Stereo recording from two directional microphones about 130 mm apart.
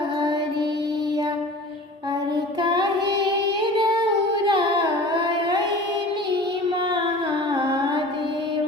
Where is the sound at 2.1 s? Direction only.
30° right (ahead or behind).